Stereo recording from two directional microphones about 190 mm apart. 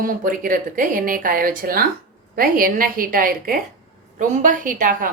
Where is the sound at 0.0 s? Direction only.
45° right (ahead or behind).